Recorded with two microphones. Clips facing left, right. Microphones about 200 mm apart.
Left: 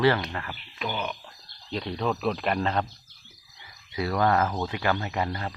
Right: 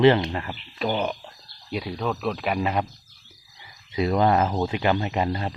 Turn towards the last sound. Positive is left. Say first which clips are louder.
# right 4 dB
turn(degrees=-20)  # may be behind; listen again after turning